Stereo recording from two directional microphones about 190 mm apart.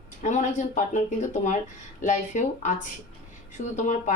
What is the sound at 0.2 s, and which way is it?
Speech, 40° left (ahead or behind).